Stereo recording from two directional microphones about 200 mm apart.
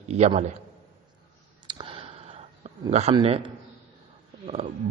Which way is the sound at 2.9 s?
35° right (ahead or behind).